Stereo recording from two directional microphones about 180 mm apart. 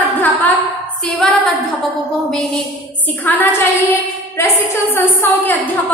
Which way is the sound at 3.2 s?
10° left (ahead or behind).